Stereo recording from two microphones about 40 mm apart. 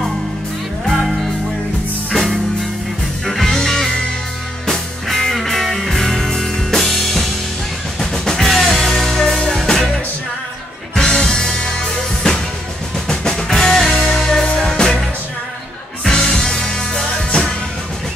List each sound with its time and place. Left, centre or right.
0.8 s music: centre
9.4 s music: centre
11.0 s music: centre
16.0 s music: centre